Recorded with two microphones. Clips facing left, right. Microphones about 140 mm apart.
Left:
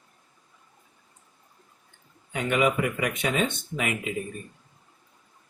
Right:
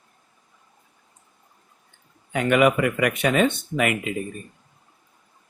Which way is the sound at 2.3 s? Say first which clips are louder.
Right 6 dB; 70° right (ahead or behind).